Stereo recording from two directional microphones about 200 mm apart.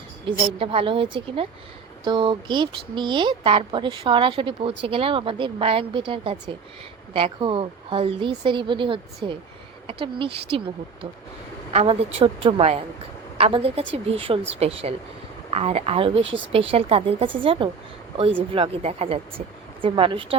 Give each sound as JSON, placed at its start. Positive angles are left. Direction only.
{"t": 0.3, "sound": "speech", "side_deg": -25}
{"t": 11.7, "sound": "speech", "side_deg": -30}